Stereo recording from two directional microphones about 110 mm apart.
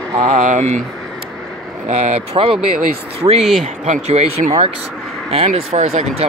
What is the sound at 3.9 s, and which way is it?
Speech, 75° right (ahead or behind).